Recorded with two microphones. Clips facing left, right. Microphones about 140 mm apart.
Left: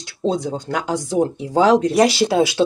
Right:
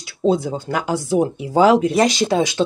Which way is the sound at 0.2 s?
5° right (ahead or behind).